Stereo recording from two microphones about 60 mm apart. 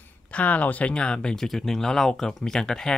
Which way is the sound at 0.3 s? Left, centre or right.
Left.